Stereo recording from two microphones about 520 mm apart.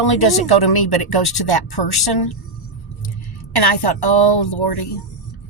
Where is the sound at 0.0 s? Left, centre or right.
Left.